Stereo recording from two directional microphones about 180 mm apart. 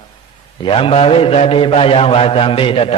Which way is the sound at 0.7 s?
30° left (ahead or behind).